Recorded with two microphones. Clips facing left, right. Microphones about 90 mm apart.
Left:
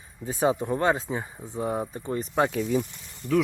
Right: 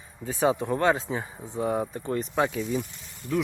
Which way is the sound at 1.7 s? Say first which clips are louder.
Right 2 dB; 10° left (ahead or behind).